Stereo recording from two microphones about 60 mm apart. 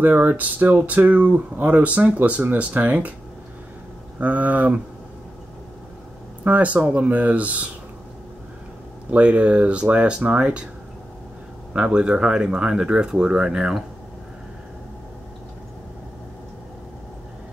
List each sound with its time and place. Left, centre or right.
0.0 s speech: right
4.2 s speech: right
6.4 s speech: right
9.1 s speech: right
11.7 s speech: centre